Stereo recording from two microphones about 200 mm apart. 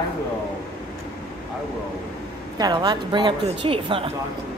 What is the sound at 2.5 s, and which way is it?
A woman's voice, 20° right (ahead or behind).